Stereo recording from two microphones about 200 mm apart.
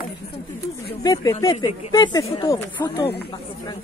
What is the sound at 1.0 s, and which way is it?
Speech, 20° left (ahead or behind).